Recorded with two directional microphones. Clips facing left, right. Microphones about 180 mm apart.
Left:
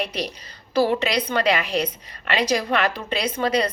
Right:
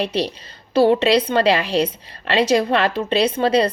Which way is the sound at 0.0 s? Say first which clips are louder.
Right 6 dB; 30° right (ahead or behind).